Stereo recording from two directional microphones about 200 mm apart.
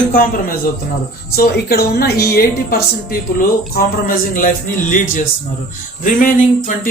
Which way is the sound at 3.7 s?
45° left (ahead or behind).